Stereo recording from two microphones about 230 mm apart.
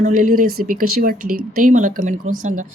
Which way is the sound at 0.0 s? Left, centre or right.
Right.